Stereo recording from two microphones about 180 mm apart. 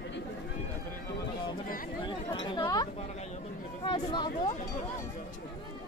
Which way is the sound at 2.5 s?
25° left (ahead or behind).